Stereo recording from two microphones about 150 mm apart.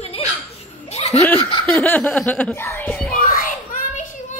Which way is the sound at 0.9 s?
45° left (ahead or behind).